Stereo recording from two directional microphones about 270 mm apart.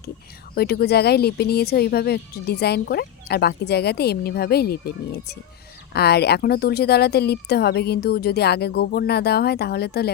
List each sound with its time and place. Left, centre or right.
0.5 s speech: left